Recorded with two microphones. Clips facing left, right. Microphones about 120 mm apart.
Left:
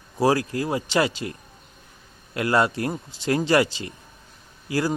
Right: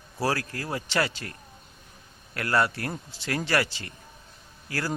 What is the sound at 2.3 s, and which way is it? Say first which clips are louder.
Speech: left 4 dB; 20° left (ahead or behind).